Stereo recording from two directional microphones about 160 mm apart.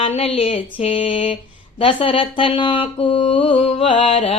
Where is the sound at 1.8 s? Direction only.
35° left (ahead or behind).